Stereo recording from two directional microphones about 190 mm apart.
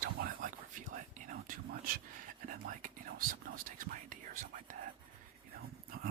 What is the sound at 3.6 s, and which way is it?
Speech, 45° right (ahead or behind).